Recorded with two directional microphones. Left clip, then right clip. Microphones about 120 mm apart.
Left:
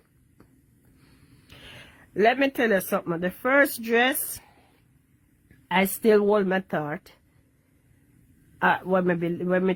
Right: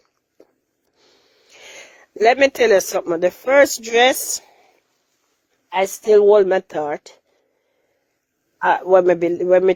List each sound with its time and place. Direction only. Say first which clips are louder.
1.5 s speech: right 7 dB; 55° right (ahead or behind)
5.7 s speech: right 6 dB; 40° right (ahead or behind)
8.6 s speech: right 9 dB; 55° right (ahead or behind)